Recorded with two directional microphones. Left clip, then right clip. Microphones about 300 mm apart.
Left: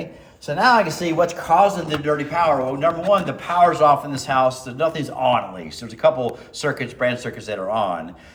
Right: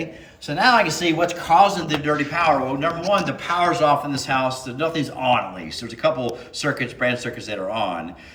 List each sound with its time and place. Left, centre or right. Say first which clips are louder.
0.4 s a man's voice: left 1 dB; centre
1.4 s a man's voice: right 2 dB; centre